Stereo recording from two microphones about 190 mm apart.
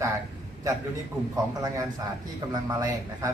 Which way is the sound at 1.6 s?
20° right (ahead or behind).